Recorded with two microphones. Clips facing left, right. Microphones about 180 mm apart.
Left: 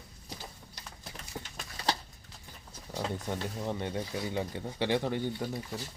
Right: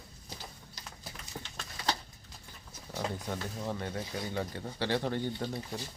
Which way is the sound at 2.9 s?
15° left (ahead or behind).